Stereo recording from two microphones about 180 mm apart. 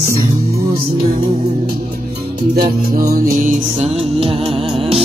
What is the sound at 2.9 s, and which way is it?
Music, 55° right (ahead or behind).